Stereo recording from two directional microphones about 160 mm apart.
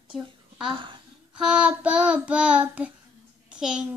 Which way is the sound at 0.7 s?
30° right (ahead or behind).